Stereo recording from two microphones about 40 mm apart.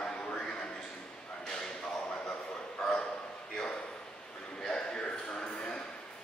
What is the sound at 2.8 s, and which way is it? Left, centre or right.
Bow-wow, left.